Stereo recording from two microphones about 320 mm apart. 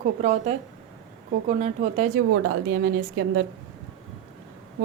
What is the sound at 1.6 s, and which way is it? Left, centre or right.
Speech, right.